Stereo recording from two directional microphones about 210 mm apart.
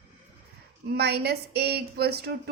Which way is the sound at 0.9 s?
50° right (ahead or behind).